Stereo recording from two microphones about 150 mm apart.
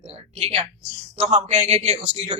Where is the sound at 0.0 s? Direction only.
45° right (ahead or behind).